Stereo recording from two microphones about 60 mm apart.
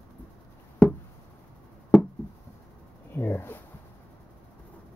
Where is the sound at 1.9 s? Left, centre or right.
Centre.